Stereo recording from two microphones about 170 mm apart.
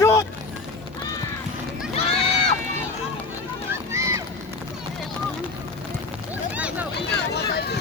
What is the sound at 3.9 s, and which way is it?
Run, 15° right (ahead or behind).